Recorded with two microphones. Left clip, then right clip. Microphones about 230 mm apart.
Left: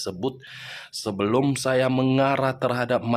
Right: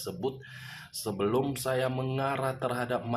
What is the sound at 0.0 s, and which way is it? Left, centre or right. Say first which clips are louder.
A man's voice: left 5 dB; left.